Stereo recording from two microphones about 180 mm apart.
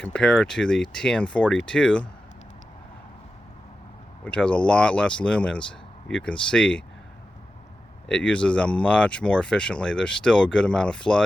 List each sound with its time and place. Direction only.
0.0 s speech: 5° left (ahead or behind)
4.2 s speech: 5° left (ahead or behind)
8.0 s speech: 5° left (ahead or behind)